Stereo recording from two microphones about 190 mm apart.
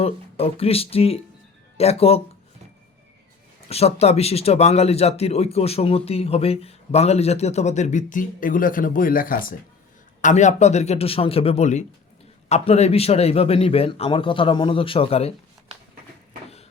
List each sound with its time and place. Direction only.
0.0 s speech: 30° left (ahead or behind)
3.7 s speech: 35° left (ahead or behind)